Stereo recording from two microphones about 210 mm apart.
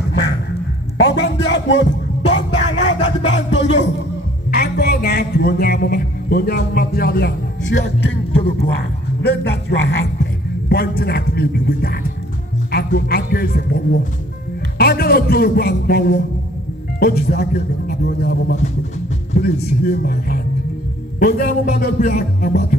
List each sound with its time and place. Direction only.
0.9 s a sound: 55° left (ahead or behind)
4.5 s a man's voice: 50° left (ahead or behind)
9.2 s a man's voice: 50° left (ahead or behind)
14.8 s a man's voice: 45° left (ahead or behind)